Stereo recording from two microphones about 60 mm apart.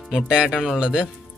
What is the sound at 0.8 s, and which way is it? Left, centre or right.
Speech, centre.